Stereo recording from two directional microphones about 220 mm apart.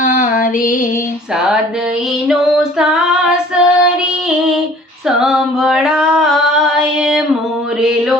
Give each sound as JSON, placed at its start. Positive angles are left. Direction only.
{"t": 0.0, "sound": "female singing", "side_deg": 40}
{"t": 2.2, "sound": "female singing", "side_deg": -5}
{"t": 3.2, "sound": "child singing", "side_deg": -5}
{"t": 5.0, "sound": "female singing", "side_deg": 0}